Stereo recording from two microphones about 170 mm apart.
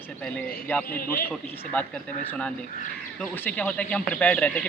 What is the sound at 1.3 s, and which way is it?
Speech, 10° left (ahead or behind).